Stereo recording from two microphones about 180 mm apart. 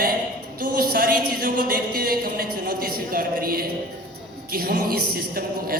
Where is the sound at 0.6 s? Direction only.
55° right (ahead or behind).